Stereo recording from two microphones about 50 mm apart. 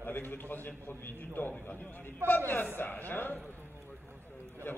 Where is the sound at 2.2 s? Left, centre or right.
Right.